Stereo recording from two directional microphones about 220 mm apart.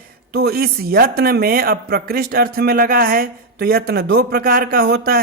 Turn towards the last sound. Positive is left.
turn(degrees=-45)  # may be behind; listen again after turning